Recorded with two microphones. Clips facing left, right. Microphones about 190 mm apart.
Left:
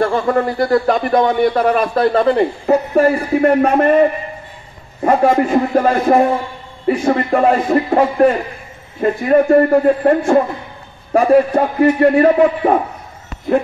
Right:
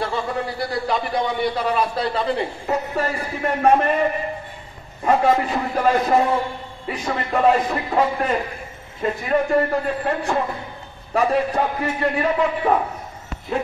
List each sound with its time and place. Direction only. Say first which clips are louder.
0.0 s speech: left 9 dB; 50° left (ahead or behind)
5.0 s speech: left 5 dB; 50° left (ahead or behind)